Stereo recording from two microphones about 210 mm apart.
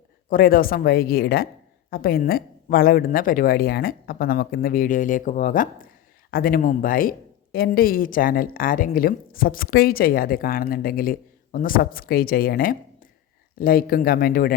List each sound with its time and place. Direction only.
0.3 s speech: 45° left (ahead or behind)